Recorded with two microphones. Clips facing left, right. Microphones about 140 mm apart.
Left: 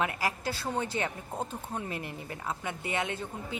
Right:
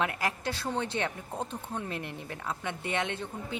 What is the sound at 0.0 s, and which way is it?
Speech, centre (ahead or behind).